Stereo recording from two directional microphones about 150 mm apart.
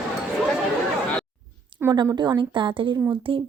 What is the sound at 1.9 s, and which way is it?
Speech, 25° right (ahead or behind).